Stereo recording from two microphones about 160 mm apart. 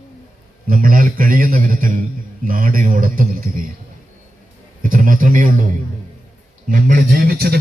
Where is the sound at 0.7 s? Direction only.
60° right (ahead or behind).